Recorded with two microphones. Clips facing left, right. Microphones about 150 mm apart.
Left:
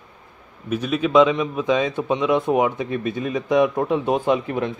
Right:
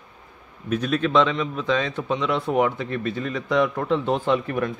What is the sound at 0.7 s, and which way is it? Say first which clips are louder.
A man's voice: left 3 dB; 5° left (ahead or behind).